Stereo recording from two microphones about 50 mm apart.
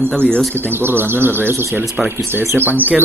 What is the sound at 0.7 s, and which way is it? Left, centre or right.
Speech, right.